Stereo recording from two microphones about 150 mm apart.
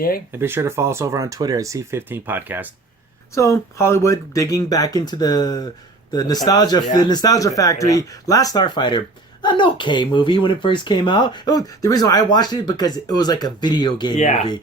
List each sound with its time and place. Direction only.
0.3 s speech: 15° right (ahead or behind)
3.3 s speech: 20° left (ahead or behind)
14.2 s speech: 50° left (ahead or behind)